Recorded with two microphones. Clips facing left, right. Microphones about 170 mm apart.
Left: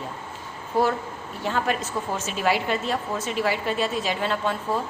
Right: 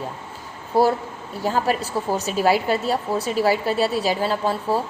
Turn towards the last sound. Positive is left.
turn(degrees=-35)  # may be behind; listen again after turning